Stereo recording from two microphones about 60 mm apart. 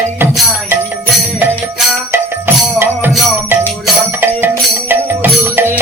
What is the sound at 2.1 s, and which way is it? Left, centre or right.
Music, right.